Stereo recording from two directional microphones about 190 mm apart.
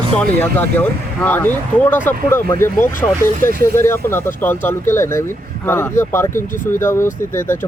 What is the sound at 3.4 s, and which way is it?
Speech, 50° right (ahead or behind).